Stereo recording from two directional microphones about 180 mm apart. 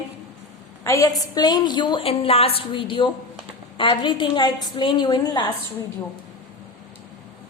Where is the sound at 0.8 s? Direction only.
15° left (ahead or behind).